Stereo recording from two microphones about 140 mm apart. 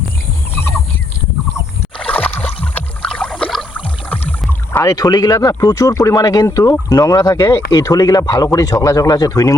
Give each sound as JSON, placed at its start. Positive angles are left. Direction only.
{"t": 2.0, "sound": "rowboat", "side_deg": 10}
{"t": 4.1, "sound": "boat", "side_deg": 10}
{"t": 4.8, "sound": "speech", "side_deg": 25}